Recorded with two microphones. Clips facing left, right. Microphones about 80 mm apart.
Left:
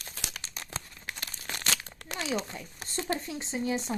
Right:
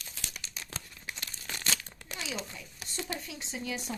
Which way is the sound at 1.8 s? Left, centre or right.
Left.